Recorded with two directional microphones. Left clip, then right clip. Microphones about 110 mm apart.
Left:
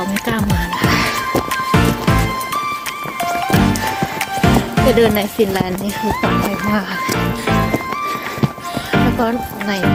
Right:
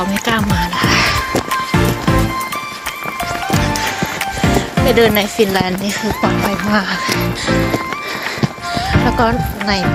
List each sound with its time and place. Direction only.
0.8 s music: 25° left (ahead or behind)
4.9 s speech: 30° left (ahead or behind)
9.2 s speech: 15° left (ahead or behind)